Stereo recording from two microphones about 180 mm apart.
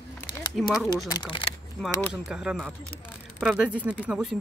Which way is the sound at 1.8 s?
5° right (ahead or behind).